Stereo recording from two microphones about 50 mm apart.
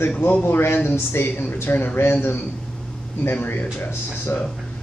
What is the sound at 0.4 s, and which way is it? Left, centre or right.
Speech, left.